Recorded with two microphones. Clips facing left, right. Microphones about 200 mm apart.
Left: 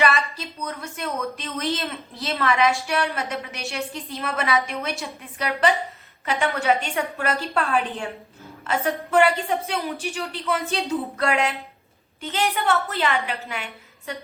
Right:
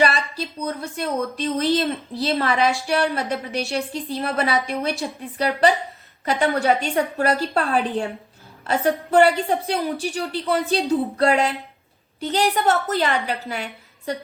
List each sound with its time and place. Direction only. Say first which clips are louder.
0.0 s a woman's voice: right 2 dB; 30° right (ahead or behind)